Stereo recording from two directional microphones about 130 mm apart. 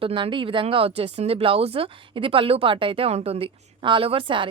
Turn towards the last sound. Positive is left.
turn(degrees=-40)  # may be behind; listen again after turning